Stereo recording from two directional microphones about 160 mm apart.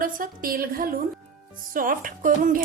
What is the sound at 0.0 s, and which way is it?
Speech, 60° right (ahead or behind).